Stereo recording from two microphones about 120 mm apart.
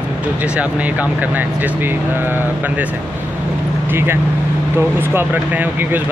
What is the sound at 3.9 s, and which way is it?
Speech, 20° right (ahead or behind).